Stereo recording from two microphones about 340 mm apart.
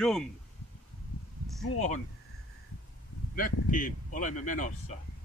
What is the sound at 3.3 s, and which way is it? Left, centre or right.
Speech, left.